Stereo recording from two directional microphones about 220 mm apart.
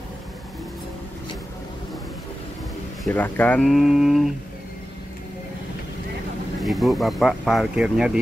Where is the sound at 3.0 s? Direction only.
5° left (ahead or behind).